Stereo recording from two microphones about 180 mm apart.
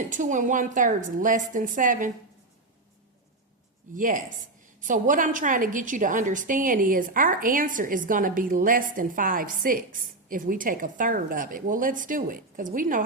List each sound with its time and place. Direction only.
0.1 s a woman's voice: 45° right (ahead or behind)
3.9 s a woman's voice: 50° right (ahead or behind)